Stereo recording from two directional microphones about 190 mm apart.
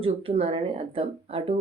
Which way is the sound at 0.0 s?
30° right (ahead or behind).